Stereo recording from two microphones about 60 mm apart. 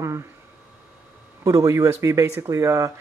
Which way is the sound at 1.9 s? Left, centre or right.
Right.